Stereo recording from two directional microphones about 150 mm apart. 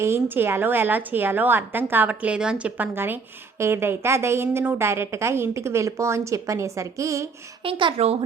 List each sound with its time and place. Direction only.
0.0 s a woman's voice: 15° right (ahead or behind)
7.6 s a woman's voice: 35° right (ahead or behind)